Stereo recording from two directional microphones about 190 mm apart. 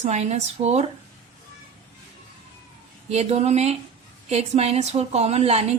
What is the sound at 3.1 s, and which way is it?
A woman's voice, 35° right (ahead or behind).